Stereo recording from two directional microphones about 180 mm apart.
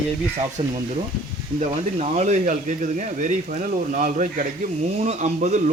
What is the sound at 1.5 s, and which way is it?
Speech, 40° right (ahead or behind).